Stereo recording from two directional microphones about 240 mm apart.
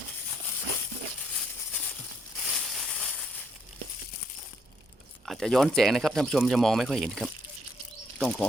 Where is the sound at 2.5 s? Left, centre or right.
Centre.